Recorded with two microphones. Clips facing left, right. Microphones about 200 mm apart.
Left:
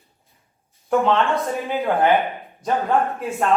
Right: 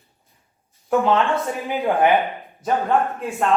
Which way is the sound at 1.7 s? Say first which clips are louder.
Right 1 dB; 15° right (ahead or behind).